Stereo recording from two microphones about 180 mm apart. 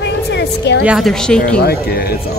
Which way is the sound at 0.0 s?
70° left (ahead or behind).